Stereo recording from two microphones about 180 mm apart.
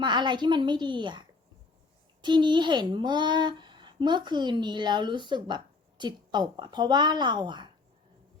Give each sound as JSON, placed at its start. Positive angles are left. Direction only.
{"t": 0.0, "sound": "a child's voice", "side_deg": -25}